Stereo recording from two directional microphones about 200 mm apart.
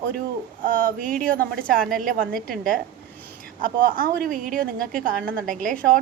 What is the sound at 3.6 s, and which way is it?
A woman's voice, 45° right (ahead or behind).